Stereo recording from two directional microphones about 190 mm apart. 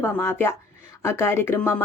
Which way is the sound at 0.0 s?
15° left (ahead or behind).